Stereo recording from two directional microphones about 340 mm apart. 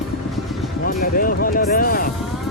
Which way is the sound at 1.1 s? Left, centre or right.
Left.